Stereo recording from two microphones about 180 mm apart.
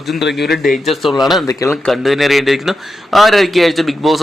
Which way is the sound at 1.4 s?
15° left (ahead or behind).